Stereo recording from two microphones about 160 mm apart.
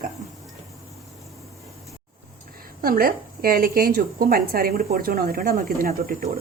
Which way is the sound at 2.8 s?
65° right (ahead or behind).